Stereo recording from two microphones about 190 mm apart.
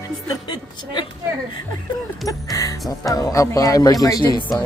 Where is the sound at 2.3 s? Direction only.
15° left (ahead or behind).